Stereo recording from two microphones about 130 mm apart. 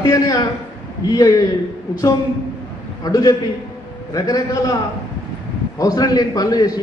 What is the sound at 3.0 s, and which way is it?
A man's voice, 25° left (ahead or behind).